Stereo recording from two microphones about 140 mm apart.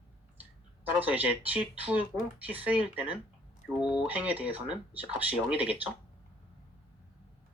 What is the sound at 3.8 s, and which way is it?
Speech, 10° right (ahead or behind).